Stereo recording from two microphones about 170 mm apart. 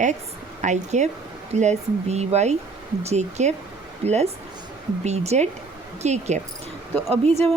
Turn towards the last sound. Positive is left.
turn(degrees=-40)  # may be behind; listen again after turning